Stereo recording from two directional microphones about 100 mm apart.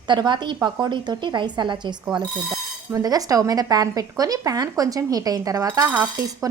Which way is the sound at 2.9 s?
35° right (ahead or behind).